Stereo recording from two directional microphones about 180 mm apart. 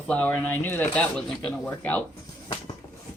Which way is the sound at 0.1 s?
5° left (ahead or behind).